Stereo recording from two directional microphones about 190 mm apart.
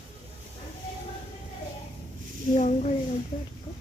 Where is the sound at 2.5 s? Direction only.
40° left (ahead or behind).